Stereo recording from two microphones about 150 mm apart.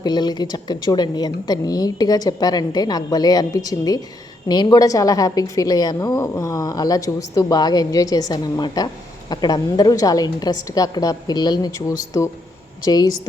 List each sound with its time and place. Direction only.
0.0 s a woman's voice: 30° left (ahead or behind)